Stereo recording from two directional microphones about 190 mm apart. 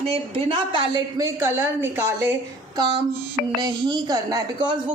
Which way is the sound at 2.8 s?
25° right (ahead or behind).